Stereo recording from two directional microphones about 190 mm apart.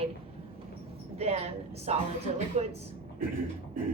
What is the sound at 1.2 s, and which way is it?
A woman's voice, 35° right (ahead or behind).